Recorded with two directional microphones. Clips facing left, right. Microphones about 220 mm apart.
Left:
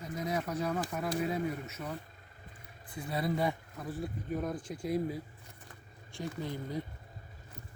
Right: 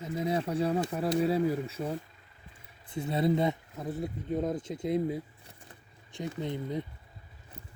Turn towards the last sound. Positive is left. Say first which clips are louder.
# right 4 dB
turn(degrees=-20)  # may be behind; listen again after turning